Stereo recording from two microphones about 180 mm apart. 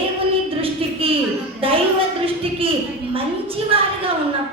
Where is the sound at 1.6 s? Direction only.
30° right (ahead or behind).